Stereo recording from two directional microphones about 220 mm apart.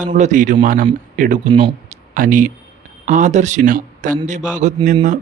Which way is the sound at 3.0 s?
35° right (ahead or behind).